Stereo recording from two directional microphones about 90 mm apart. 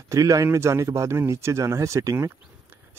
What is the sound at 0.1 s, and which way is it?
Speech, 40° right (ahead or behind).